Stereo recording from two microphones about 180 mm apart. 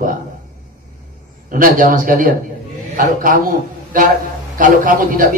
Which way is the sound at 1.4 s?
50° right (ahead or behind).